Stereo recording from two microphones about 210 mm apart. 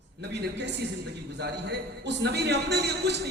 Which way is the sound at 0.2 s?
55° right (ahead or behind).